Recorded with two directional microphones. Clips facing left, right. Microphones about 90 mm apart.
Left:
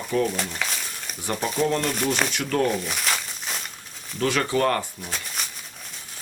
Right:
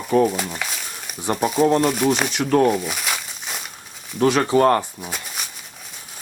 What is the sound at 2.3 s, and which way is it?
Speech, 25° right (ahead or behind).